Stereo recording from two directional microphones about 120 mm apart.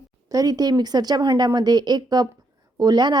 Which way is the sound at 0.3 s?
30° right (ahead or behind).